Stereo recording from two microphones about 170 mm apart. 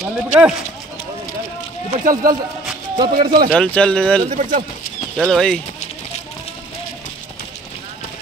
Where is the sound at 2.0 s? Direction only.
50° right (ahead or behind).